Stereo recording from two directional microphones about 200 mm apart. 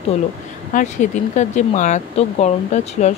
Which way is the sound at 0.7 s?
40° left (ahead or behind).